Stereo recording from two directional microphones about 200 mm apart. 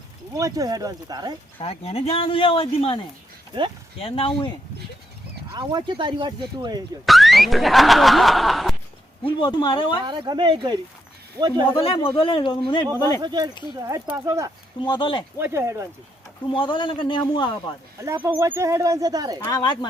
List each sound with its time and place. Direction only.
0.3 s speech: 15° right (ahead or behind)
1.5 s speech: 30° left (ahead or behind)
4.0 s speech: 25° left (ahead or behind)
5.5 s speech: 25° right (ahead or behind)
7.0 s speech: centre (ahead or behind)
9.2 s speech: 25° left (ahead or behind)
10.1 s speech: 25° right (ahead or behind)
11.7 s speech: 25° left (ahead or behind)
13.2 s speech: 20° right (ahead or behind)
14.8 s speech: 25° left (ahead or behind)
15.4 s speech: 10° right (ahead or behind)
16.5 s speech: 25° left (ahead or behind)
18.0 s speech: 10° right (ahead or behind)
19.4 s speech: 20° left (ahead or behind)